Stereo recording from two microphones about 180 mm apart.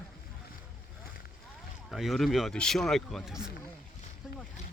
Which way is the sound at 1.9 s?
Centre (ahead or behind).